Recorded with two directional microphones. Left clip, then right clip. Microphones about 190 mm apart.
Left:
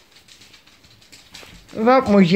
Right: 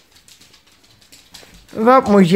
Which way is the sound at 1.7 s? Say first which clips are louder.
Right 3 dB; 30° right (ahead or behind).